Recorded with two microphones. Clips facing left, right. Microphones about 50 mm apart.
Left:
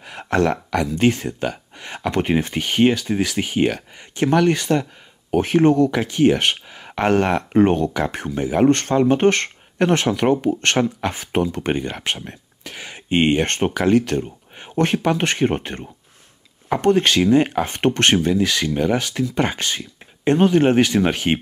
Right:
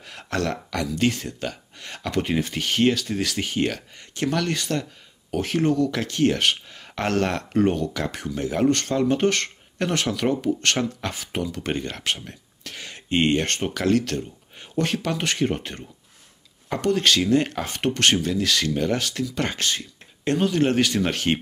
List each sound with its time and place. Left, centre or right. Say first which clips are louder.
0.0 s speech: left 7 dB; left
5.9 s speech: left 5 dB; centre
7.6 s speech: left 4 dB; left
7.9 s speech: left 5 dB; left
8.6 s speech: left 5 dB; left
13.5 s speech: left 5 dB; left
13.7 s speech: left 4 dB; left
17.6 s speech: left 4 dB; left